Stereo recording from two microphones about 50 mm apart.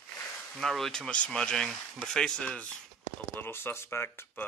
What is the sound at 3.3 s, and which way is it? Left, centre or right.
Speech, left.